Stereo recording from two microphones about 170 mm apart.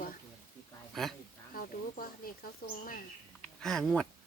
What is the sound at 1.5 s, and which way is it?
Speech, 60° left (ahead or behind).